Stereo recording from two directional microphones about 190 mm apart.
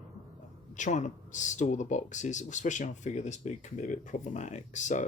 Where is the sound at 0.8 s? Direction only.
40° left (ahead or behind).